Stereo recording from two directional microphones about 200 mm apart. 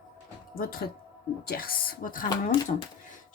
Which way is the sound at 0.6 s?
50° left (ahead or behind).